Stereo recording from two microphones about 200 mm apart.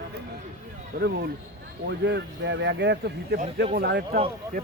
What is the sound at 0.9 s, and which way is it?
Speech, 55° right (ahead or behind).